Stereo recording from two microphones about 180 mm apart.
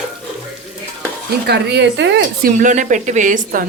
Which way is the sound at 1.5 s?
70° right (ahead or behind).